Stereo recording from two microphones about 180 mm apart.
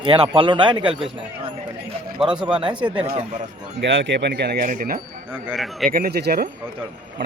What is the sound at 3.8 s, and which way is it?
Speech, 90° right.